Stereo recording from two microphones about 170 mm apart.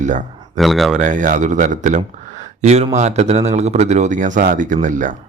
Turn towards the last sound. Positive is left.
turn(degrees=-50)  # may be behind; listen again after turning